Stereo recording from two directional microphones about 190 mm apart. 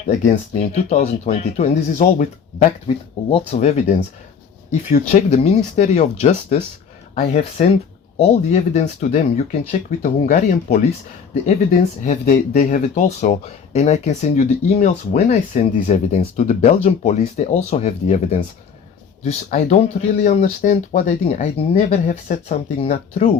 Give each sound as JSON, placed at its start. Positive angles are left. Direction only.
{"t": 0.1, "sound": "speech", "side_deg": 35}
{"t": 2.8, "sound": "speech", "side_deg": 30}
{"t": 12.2, "sound": "speech", "side_deg": 45}